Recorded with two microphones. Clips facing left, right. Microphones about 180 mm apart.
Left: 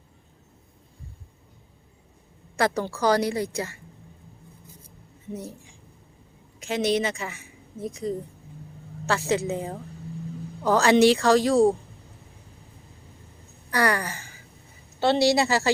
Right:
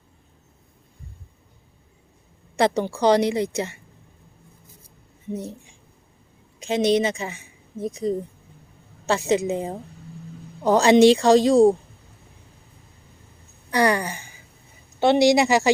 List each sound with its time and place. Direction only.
2.6 s a woman's voice: 20° right (ahead or behind)
5.3 s a woman's voice: 20° right (ahead or behind)
13.7 s gasp: 20° right (ahead or behind)
14.9 s a woman's voice: 15° right (ahead or behind)